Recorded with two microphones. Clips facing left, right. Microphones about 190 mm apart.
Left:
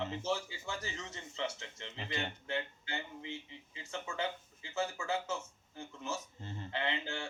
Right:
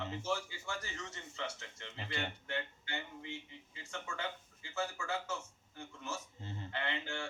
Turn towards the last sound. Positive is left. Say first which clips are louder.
# left 2 dB
turn(degrees=20)  # may be behind; listen again after turning